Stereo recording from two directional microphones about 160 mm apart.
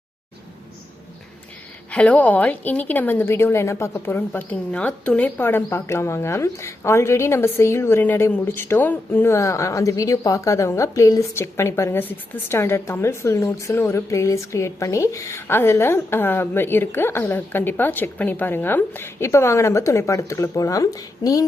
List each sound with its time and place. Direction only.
1.9 s a woman's voice: 10° left (ahead or behind)